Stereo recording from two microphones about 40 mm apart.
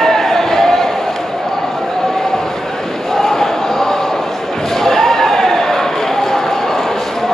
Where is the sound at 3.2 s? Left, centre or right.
Centre.